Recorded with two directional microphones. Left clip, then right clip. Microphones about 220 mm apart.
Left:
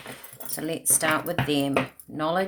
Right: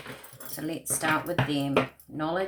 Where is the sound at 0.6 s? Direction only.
50° left (ahead or behind).